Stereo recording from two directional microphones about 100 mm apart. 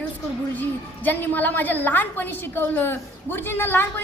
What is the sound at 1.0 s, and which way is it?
A woman's voice, 20° left (ahead or behind).